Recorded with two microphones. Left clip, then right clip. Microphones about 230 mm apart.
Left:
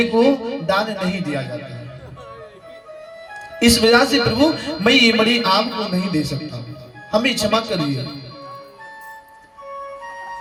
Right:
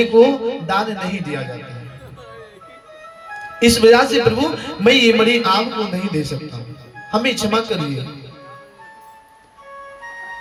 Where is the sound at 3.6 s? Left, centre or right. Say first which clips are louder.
Right 3 dB; centre.